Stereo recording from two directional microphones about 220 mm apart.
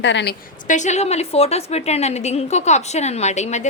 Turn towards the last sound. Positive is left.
turn(degrees=30)  # may be behind; listen again after turning